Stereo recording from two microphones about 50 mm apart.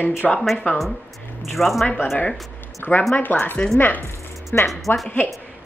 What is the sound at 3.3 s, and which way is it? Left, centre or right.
Speech, left.